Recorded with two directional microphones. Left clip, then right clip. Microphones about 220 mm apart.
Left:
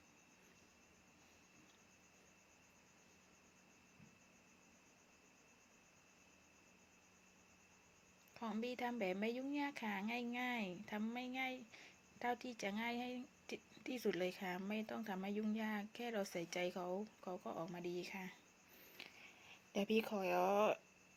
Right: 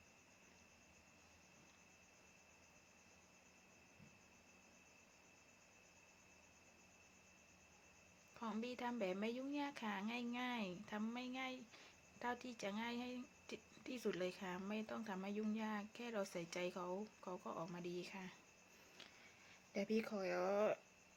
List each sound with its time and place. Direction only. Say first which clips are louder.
8.3 s speech: left 3 dB; 10° left (ahead or behind)
19.0 s a sound: left 5 dB; 20° left (ahead or behind)
19.7 s speech: left 4 dB; 20° left (ahead or behind)